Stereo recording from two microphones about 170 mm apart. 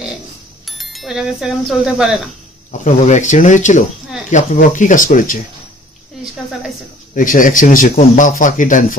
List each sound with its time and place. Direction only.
0.7 s speech: centre (ahead or behind)
2.7 s a man's voice: 45° left (ahead or behind)
7.2 s a man's voice: 50° left (ahead or behind)